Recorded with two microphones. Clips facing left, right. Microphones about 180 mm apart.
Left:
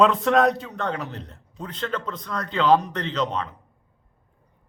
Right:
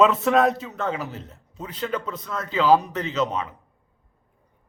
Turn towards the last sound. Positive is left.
turn(degrees=-5)  # may be behind; listen again after turning